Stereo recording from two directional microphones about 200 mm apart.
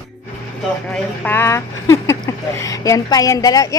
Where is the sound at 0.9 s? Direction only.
10° left (ahead or behind).